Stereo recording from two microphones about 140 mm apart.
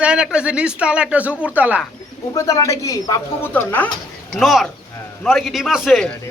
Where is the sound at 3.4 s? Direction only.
15° left (ahead or behind).